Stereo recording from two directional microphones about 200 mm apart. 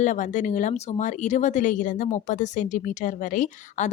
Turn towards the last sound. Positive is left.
turn(degrees=35)  # may be behind; listen again after turning